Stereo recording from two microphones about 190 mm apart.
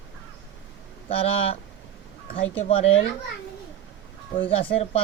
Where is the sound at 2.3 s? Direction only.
30° left (ahead or behind).